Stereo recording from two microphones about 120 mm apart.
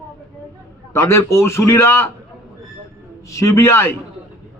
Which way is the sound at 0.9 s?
20° left (ahead or behind).